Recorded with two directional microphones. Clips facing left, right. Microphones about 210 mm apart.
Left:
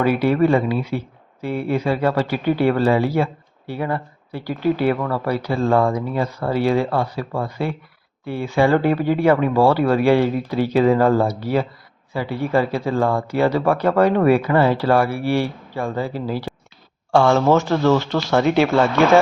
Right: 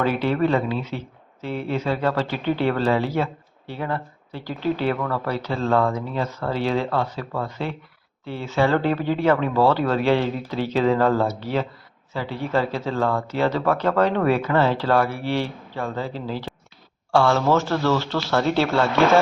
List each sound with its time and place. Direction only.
0.0 s speech: 10° left (ahead or behind)